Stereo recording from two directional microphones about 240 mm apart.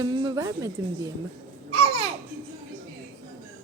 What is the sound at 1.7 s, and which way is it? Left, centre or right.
Babbling, right.